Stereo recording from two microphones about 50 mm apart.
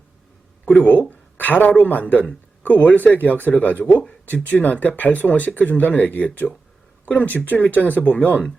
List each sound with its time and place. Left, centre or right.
0.8 s speech: left